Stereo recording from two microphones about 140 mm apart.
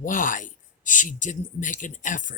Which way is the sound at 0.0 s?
70° left (ahead or behind).